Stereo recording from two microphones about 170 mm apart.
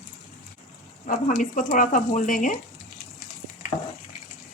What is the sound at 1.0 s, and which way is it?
Speech, 50° left (ahead or behind).